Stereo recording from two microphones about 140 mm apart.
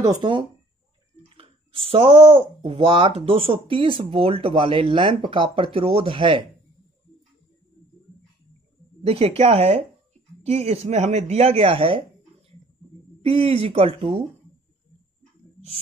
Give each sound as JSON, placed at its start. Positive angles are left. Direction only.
{"t": 0.0, "sound": "speech", "side_deg": -30}
{"t": 1.3, "sound": "speech", "side_deg": -40}
{"t": 9.0, "sound": "speech", "side_deg": -45}
{"t": 13.2, "sound": "speech", "side_deg": -45}